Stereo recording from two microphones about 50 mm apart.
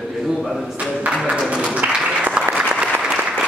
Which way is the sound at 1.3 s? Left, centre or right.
Centre.